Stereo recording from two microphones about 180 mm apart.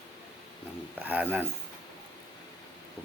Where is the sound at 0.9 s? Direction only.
10° right (ahead or behind).